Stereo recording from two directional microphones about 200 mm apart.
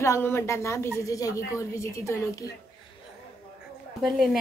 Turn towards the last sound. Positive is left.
turn(degrees=0)  # may be behind; listen again after turning